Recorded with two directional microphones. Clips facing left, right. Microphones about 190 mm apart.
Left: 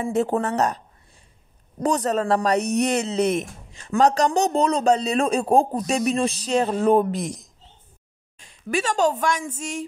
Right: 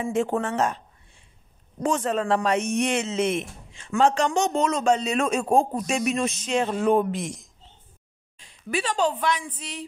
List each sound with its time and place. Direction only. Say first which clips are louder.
0.0 s a man's voice: left 2 dB; 35° left (ahead or behind)